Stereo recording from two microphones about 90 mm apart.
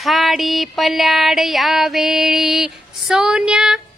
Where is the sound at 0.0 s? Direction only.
Centre (ahead or behind).